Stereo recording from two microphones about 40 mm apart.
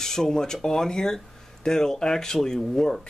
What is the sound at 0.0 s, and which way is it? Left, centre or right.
Speech, centre.